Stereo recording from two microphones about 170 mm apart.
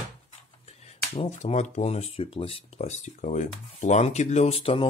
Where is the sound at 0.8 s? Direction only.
40° left (ahead or behind).